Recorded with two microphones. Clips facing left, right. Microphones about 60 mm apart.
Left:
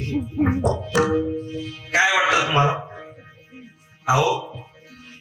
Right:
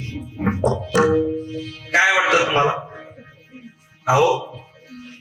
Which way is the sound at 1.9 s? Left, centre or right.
Right.